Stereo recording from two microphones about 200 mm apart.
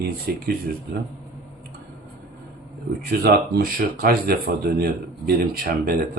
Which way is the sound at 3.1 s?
50° right (ahead or behind).